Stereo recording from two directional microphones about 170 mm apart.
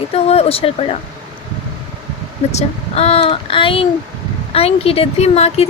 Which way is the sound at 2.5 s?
35° left (ahead or behind).